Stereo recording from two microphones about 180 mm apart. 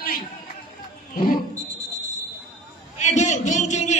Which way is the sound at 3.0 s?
40° left (ahead or behind).